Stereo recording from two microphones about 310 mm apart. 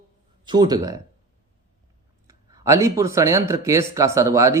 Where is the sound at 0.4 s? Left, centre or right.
Centre.